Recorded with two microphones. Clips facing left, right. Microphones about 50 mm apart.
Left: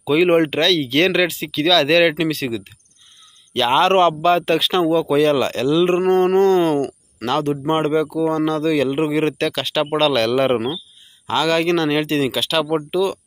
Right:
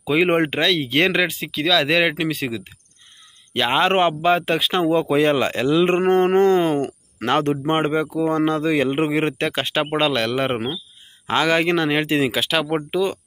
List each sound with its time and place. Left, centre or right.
0.0 s speech: centre
4.9 s speech: right
7.2 s speech: right
7.5 s speech: centre
10.1 s a man's voice: centre
11.2 s speech: right
11.6 s speech: centre